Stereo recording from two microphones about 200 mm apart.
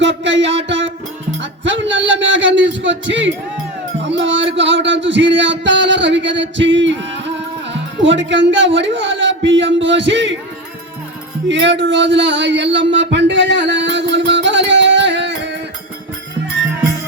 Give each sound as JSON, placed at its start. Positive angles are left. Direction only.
{"t": 0.0, "sound": "music", "side_deg": -65}
{"t": 7.7, "sound": "speech", "side_deg": -65}
{"t": 11.4, "sound": "speech", "side_deg": -60}
{"t": 12.9, "sound": "music", "side_deg": -60}